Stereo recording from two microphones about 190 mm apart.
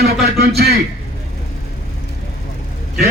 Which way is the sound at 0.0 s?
55° right (ahead or behind).